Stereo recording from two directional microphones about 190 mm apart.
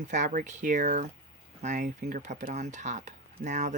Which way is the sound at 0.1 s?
40° right (ahead or behind).